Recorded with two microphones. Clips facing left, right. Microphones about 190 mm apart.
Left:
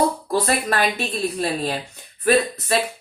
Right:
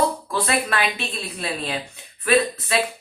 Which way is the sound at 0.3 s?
40° left (ahead or behind).